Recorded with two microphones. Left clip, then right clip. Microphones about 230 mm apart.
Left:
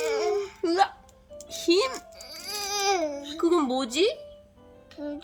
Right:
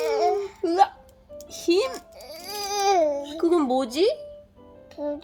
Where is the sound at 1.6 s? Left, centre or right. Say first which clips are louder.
Right 1 dB; centre.